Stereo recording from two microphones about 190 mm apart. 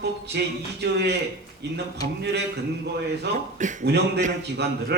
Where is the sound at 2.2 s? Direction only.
60° right (ahead or behind).